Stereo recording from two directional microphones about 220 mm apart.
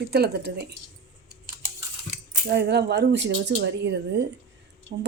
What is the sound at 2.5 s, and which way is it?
Speech, 50° right (ahead or behind).